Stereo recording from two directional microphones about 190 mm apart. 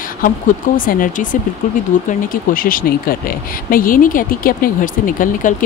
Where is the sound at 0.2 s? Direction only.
45° left (ahead or behind).